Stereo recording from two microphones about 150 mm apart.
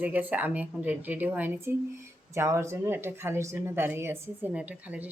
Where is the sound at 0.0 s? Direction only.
10° right (ahead or behind).